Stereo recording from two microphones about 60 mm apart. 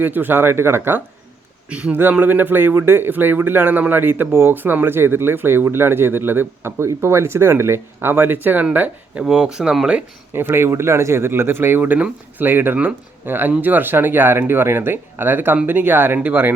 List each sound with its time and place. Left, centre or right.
0.0 s speech: right
1.7 s speech: right
2.0 s speech: right
9.2 s speech: centre
10.3 s speech: right